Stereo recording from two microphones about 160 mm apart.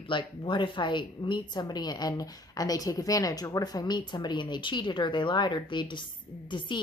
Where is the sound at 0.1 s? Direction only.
30° left (ahead or behind).